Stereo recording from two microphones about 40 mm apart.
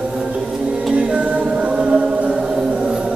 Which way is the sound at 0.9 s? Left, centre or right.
Right.